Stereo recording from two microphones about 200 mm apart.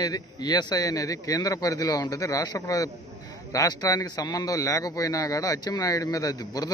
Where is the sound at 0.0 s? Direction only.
20° left (ahead or behind).